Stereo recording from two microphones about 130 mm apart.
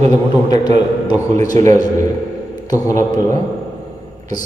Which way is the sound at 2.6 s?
25° left (ahead or behind).